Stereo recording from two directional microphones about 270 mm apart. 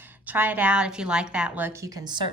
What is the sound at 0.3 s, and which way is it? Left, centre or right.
A woman's voice, centre.